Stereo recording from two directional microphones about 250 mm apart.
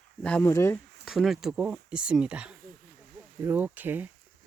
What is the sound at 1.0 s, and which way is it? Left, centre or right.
Speech, centre.